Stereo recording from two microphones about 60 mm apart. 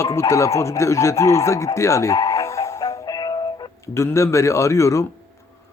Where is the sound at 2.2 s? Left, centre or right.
Left.